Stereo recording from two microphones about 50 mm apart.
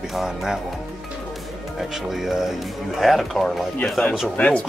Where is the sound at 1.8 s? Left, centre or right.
Centre.